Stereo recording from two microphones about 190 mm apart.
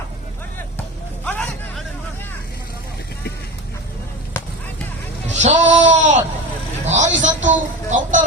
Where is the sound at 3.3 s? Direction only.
55° left (ahead or behind).